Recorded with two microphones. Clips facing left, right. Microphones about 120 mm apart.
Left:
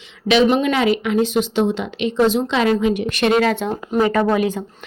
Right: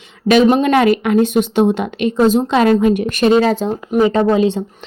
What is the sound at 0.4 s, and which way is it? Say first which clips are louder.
A woman's voice: right 4 dB; 40° right (ahead or behind).